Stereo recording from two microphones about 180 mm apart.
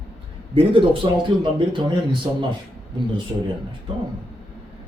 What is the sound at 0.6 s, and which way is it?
Speech, 30° right (ahead or behind).